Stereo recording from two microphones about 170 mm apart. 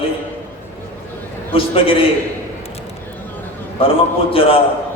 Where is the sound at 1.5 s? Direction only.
30° left (ahead or behind).